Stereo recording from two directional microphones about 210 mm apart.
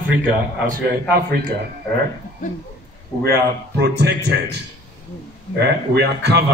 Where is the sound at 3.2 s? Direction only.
50° right (ahead or behind).